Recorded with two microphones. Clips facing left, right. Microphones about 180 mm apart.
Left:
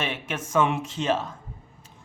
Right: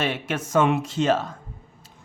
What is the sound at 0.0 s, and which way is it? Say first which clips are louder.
Speech: right 4 dB; 40° right (ahead or behind).